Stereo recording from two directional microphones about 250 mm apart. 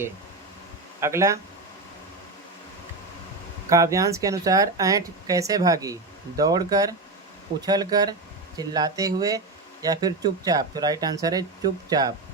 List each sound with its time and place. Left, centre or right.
0.9 s speech: centre
3.7 s speech: centre